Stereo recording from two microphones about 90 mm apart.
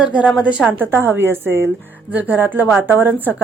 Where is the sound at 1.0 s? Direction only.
25° right (ahead or behind).